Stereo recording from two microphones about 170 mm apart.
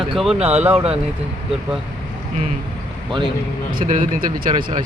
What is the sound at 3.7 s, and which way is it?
Speech, 50° right (ahead or behind).